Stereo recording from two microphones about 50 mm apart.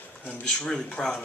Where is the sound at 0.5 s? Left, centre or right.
Centre.